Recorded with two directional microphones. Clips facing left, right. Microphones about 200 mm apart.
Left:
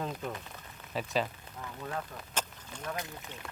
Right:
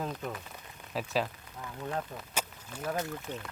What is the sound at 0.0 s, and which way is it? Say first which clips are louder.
Speech: even; centre (ahead or behind).